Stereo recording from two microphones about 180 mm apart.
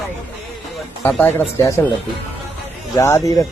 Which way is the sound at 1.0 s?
10° left (ahead or behind).